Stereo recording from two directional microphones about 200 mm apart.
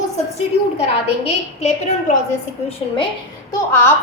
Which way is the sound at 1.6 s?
35° left (ahead or behind).